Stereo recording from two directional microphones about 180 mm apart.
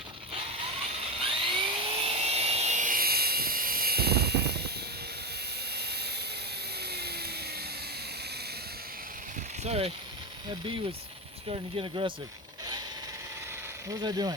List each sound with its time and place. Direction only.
0.3 s dental drill: 30° right (ahead or behind); by 4.7 s 65° right (ahead or behind)
5.7 s a sound: 65° right (ahead or behind)
9.6 s speech: 35° right (ahead or behind)
11.4 s speech: 30° right (ahead or behind)
14.0 s speech: 25° right (ahead or behind)